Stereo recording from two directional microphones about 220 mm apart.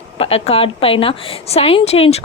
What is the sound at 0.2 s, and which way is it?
A woman's voice, 25° left (ahead or behind).